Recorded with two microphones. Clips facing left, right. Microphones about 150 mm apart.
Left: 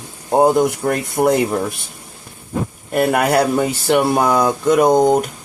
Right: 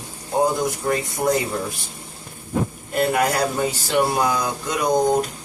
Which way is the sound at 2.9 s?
65° left (ahead or behind).